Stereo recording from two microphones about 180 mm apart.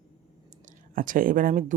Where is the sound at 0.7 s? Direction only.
50° right (ahead or behind).